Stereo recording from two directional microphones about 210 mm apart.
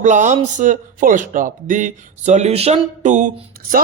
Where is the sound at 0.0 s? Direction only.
35° right (ahead or behind).